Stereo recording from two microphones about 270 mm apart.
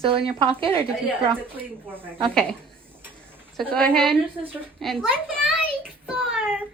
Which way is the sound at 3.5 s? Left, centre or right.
Centre.